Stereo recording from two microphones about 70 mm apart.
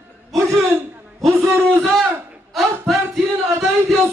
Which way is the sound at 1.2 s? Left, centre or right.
Right.